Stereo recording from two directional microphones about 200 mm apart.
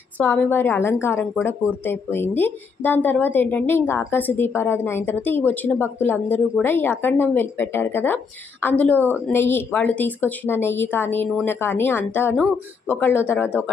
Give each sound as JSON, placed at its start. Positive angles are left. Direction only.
{"t": 0.2, "sound": "a woman's voice", "side_deg": 10}